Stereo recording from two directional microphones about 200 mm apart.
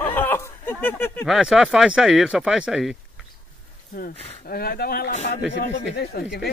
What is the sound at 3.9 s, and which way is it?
Speech, 45° left (ahead or behind).